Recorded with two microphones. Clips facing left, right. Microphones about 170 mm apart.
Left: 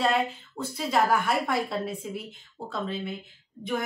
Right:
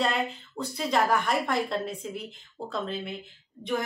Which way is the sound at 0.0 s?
Centre (ahead or behind).